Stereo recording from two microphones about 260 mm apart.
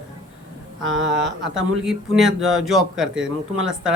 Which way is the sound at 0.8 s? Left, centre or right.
Right.